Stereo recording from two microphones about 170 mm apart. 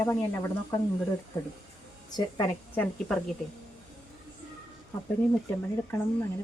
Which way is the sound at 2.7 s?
10° left (ahead or behind).